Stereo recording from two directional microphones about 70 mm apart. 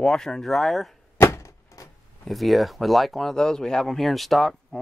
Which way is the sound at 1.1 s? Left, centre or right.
Left.